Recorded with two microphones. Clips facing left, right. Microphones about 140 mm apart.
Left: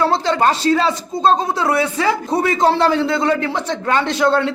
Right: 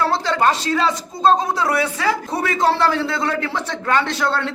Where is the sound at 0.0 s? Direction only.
20° left (ahead or behind).